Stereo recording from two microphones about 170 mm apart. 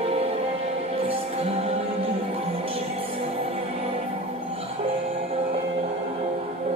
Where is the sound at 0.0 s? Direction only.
35° right (ahead or behind).